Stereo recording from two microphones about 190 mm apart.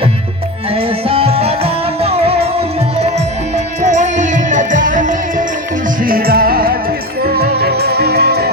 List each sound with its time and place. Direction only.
0.8 s music: 30° right (ahead or behind)
3.8 s music: 40° right (ahead or behind); by 8.4 s 60° right (ahead or behind)